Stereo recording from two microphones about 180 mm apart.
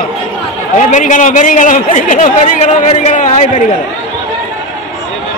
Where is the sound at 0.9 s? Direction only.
45° left (ahead or behind).